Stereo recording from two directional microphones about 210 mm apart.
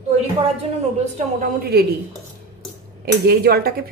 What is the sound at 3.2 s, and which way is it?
Speech, 45° right (ahead or behind).